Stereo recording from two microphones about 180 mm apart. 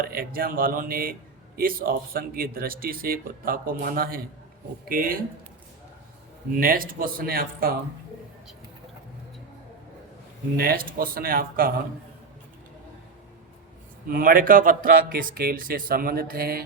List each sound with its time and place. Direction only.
0.0 s speech: 55° right (ahead or behind)
6.5 s speech: 50° right (ahead or behind)
10.6 s speech: 55° right (ahead or behind)
14.1 s speech: 50° right (ahead or behind)